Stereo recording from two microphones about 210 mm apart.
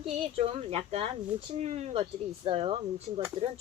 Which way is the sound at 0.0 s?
25° right (ahead or behind).